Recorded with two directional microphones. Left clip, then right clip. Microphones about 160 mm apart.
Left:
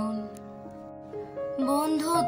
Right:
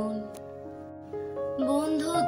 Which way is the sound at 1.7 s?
25° left (ahead or behind).